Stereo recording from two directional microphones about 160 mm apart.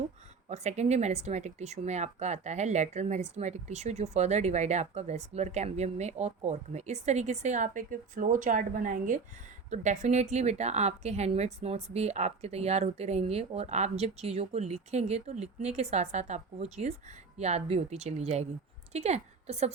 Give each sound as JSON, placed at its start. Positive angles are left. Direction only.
{"t": 0.4, "sound": "a woman's voice", "side_deg": -45}